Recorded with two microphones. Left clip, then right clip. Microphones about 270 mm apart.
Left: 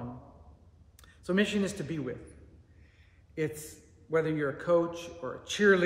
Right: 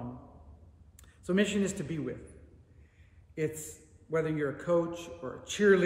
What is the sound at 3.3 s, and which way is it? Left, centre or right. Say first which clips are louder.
Speech: even; centre.